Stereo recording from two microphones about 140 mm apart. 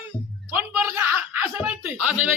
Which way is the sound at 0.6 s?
15° right (ahead or behind).